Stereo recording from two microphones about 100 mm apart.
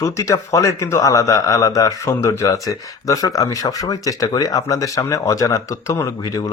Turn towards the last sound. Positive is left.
turn(degrees=35)  # may be behind; listen again after turning